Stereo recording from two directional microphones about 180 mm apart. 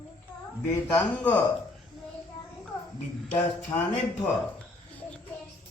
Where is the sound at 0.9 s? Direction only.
10° left (ahead or behind).